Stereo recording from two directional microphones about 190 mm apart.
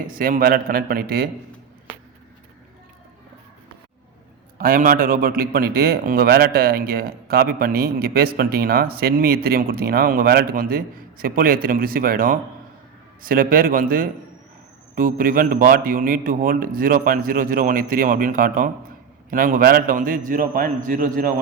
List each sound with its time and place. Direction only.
0.1 s a man's voice: 50° right (ahead or behind)
4.5 s a man's voice: 50° right (ahead or behind)